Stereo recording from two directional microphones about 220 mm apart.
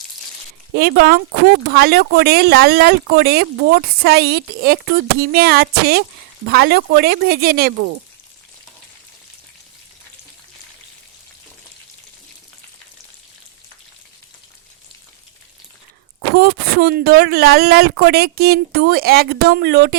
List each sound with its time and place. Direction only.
0.7 s speech: 45° right (ahead or behind)
16.3 s speech: 45° right (ahead or behind)